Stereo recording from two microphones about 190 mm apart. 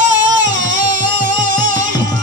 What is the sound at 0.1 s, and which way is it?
Music, 85° right.